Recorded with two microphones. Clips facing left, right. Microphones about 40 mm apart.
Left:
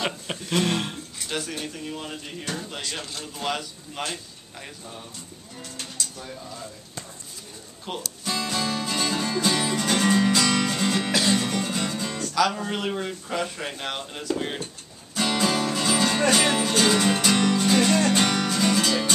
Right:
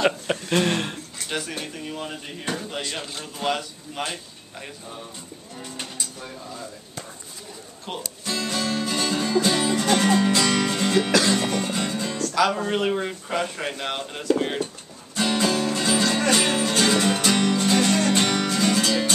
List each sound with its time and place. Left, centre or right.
0.3 s a sound: centre
1.6 s a man's voice: centre
7.9 s speech: centre
8.3 s music: centre
12.4 s a man's voice: centre
15.1 s music: centre